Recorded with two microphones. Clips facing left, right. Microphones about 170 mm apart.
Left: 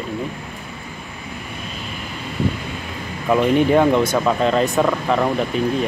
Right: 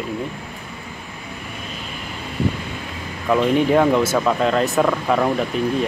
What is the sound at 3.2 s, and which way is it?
Speech, centre (ahead or behind).